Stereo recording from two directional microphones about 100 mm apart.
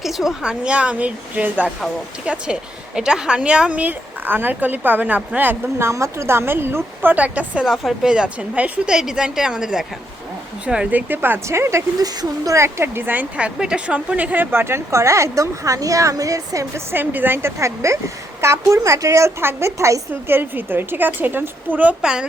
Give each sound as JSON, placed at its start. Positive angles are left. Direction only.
{"t": 0.0, "sound": "a woman's voice", "side_deg": -5}
{"t": 5.9, "sound": "a woman's voice", "side_deg": -30}
{"t": 11.1, "sound": "speech", "side_deg": -20}
{"t": 16.9, "sound": "speech", "side_deg": -20}